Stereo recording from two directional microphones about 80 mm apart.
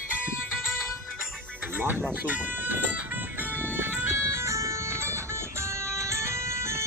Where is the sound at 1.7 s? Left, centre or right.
Right.